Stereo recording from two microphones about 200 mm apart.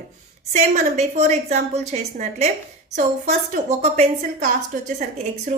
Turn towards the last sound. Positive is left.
turn(degrees=-35)  # may be behind; listen again after turning